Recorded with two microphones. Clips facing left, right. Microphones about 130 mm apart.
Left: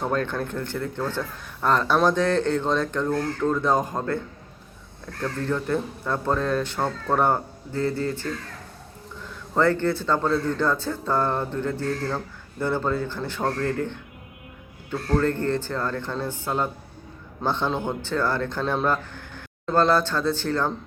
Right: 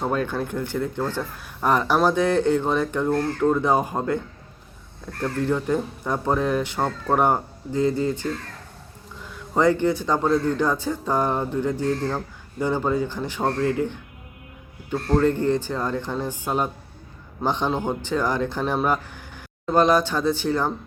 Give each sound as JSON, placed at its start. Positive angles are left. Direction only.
{"t": 0.0, "sound": "speech", "side_deg": -10}
{"t": 5.2, "sound": "speech", "side_deg": -15}
{"t": 9.6, "sound": "speech", "side_deg": -15}